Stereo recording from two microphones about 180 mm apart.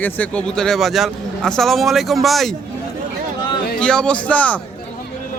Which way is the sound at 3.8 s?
5° left (ahead or behind).